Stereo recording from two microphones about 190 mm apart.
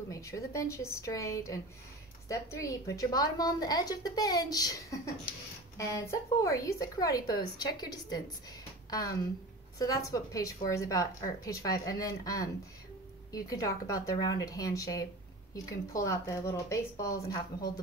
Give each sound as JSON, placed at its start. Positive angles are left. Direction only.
{"t": 0.1, "sound": "a woman's voice", "side_deg": 15}